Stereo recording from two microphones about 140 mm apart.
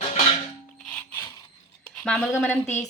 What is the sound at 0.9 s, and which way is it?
Music, 10° left (ahead or behind).